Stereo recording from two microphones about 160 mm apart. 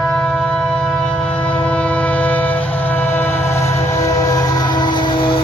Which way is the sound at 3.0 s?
15° left (ahead or behind).